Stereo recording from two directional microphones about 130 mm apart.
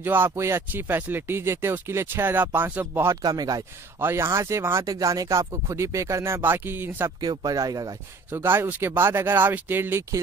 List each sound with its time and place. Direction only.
0.0 s speech: 15° right (ahead or behind)
3.2 s speech: 30° right (ahead or behind)
4.0 s speech: 20° right (ahead or behind)
7.2 s speech: 30° right (ahead or behind)